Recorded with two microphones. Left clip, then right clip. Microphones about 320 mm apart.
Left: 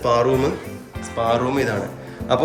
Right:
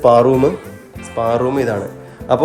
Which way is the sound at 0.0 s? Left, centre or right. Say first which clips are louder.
Right 7 dB; centre.